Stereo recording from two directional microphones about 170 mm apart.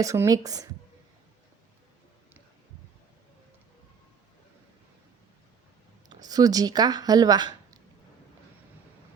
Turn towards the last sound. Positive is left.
turn(degrees=-25)  # may be behind; listen again after turning